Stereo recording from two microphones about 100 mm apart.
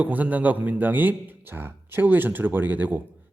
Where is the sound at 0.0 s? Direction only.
15° right (ahead or behind).